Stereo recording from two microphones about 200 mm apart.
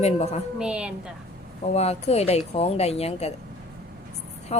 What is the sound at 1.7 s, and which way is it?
A woman's voice, 30° left (ahead or behind).